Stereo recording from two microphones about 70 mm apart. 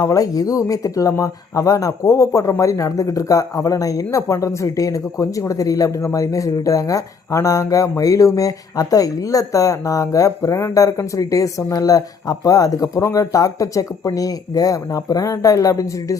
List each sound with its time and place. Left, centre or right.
0.0 s speech: left